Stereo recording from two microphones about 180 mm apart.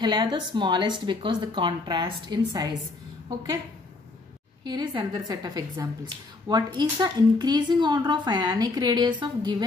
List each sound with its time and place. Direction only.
0.0 s a woman's voice: 25° right (ahead or behind)
4.6 s a woman's voice: 25° right (ahead or behind)